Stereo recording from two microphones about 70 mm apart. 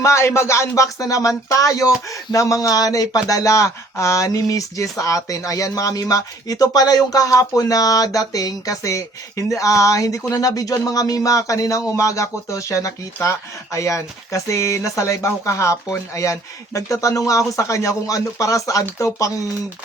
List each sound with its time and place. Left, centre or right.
0.0 s speech: left
0.8 s speech: left